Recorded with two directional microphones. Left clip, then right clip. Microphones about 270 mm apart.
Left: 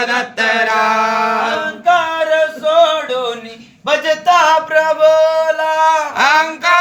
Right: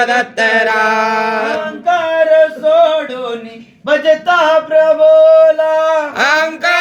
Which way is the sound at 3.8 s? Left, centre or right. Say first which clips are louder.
Right 2 dB; left.